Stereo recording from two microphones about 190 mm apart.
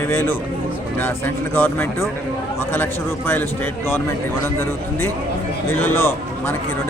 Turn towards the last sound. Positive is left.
turn(degrees=10)  # may be behind; listen again after turning